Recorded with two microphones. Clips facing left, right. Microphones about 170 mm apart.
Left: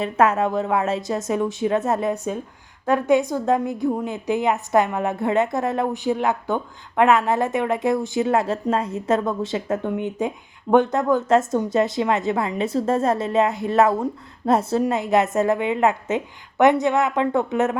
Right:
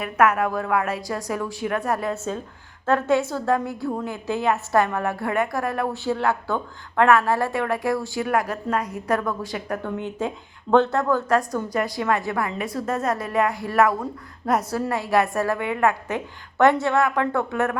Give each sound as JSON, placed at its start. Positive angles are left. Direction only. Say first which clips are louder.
{"t": 0.0, "sound": "a woman's voice", "louder": "left 1 dB", "side_deg": 25}